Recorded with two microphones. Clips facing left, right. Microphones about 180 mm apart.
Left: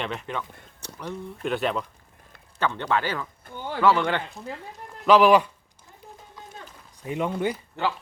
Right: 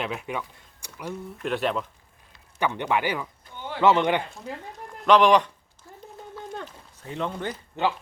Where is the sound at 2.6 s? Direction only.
15° right (ahead or behind).